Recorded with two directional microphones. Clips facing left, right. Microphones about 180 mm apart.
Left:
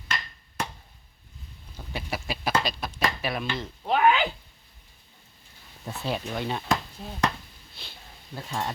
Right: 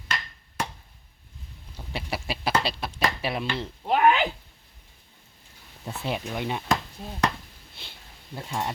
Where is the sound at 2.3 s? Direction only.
30° right (ahead or behind).